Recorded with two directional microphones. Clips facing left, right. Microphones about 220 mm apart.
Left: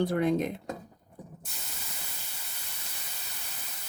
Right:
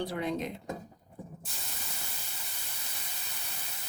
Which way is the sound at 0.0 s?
50° left (ahead or behind).